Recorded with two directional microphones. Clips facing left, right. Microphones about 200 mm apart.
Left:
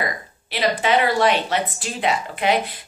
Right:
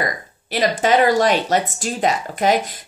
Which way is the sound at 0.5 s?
45° right (ahead or behind).